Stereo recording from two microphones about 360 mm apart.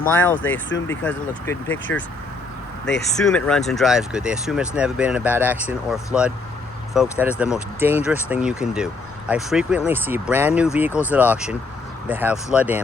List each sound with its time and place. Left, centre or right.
0.0 s speech: left
0.9 s speech: centre
1.9 s speech: left
3.2 s speech: centre